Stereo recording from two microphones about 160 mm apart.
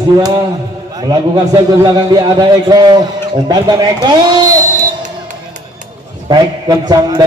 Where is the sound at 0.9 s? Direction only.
25° right (ahead or behind).